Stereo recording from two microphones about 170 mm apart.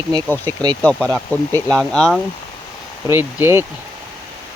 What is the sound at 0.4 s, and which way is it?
Speech, 25° right (ahead or behind).